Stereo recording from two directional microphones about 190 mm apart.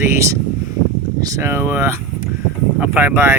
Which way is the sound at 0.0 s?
15° right (ahead or behind).